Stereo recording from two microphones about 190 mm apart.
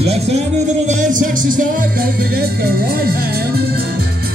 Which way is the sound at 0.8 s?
40° right (ahead or behind).